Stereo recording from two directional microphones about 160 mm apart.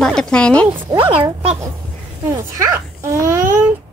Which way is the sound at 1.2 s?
15° right (ahead or behind).